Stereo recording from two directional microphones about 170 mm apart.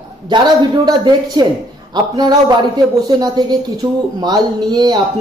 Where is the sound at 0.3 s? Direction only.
25° right (ahead or behind).